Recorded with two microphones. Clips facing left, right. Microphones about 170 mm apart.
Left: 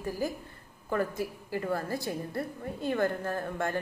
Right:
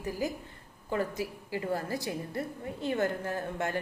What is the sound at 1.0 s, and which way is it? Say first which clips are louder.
Speech: left 1 dB; 50° left (ahead or behind).